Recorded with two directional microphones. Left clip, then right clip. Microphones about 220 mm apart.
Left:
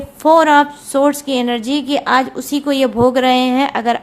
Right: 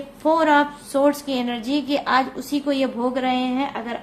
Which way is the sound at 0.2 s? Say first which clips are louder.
Left 8 dB; 35° left (ahead or behind).